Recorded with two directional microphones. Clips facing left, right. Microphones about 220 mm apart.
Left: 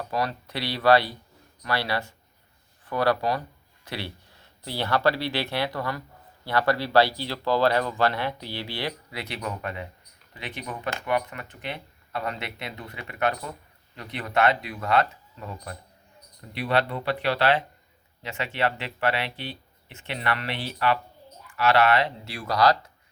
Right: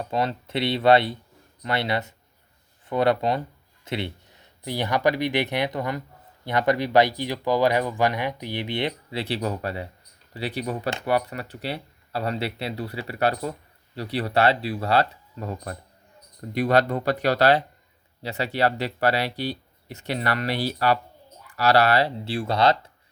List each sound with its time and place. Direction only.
0.0 s speech: 25° right (ahead or behind)